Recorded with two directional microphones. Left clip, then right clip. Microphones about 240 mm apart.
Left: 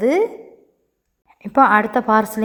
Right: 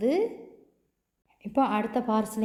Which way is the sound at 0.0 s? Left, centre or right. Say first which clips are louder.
Left 9 dB; left.